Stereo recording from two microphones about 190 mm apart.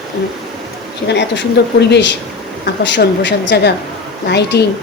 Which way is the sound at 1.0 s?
65° left (ahead or behind).